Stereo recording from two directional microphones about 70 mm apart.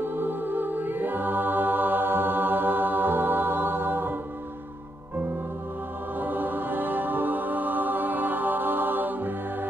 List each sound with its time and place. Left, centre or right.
0.0 s music: right
6.1 s music: right